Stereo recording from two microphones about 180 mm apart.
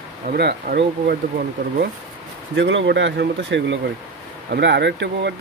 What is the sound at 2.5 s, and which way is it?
Speech, 85° right.